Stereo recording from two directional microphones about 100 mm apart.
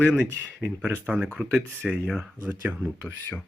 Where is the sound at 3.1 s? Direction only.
20° left (ahead or behind).